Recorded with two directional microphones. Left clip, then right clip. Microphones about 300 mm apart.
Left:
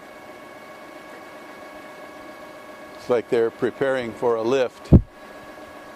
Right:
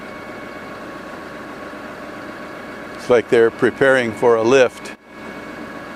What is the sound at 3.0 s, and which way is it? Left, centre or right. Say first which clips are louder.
Speech: right 7 dB; left.